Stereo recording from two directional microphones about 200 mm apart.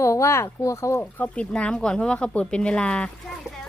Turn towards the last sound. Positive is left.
turn(degrees=5)  # may be behind; listen again after turning